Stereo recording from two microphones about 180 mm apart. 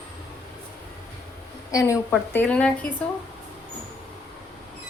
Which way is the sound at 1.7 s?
15° left (ahead or behind).